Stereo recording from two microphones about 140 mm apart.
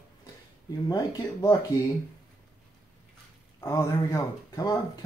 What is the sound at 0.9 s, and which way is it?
Speech, 25° left (ahead or behind).